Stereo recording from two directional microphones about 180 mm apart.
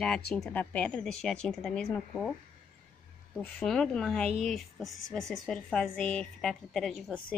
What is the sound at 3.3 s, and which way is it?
Speech, 5° left (ahead or behind).